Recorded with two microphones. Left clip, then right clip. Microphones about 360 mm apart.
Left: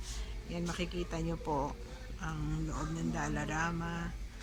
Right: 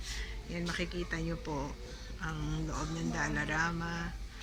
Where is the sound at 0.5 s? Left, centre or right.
Centre.